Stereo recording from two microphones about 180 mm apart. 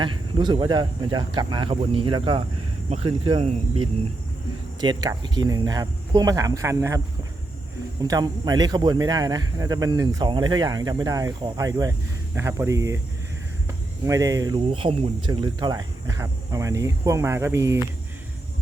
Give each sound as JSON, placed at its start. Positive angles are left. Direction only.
{"t": 0.0, "sound": "a man's voice", "side_deg": -25}
{"t": 4.8, "sound": "a man's voice", "side_deg": -25}
{"t": 8.0, "sound": "a man's voice", "side_deg": -20}
{"t": 14.0, "sound": "speech", "side_deg": -20}